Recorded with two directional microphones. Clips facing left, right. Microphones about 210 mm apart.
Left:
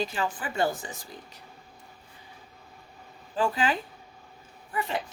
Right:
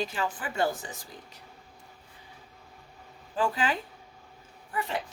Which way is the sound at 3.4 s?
25° left (ahead or behind).